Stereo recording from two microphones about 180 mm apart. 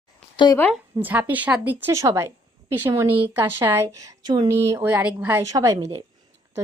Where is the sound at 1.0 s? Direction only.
10° right (ahead or behind).